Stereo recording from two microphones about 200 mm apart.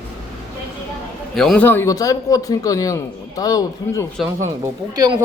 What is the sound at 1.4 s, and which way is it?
Speech, 5° left (ahead or behind).